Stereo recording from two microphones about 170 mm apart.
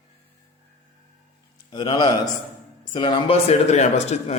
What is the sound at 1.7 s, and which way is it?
A man's voice, 25° left (ahead or behind).